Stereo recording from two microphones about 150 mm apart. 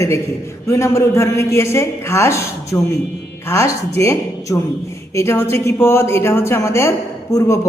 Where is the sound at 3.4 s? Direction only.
20° left (ahead or behind).